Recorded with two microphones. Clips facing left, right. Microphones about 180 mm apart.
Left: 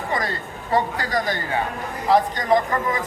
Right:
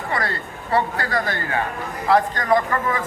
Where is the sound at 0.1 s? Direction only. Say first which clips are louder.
Right 1 dB; 15° left (ahead or behind).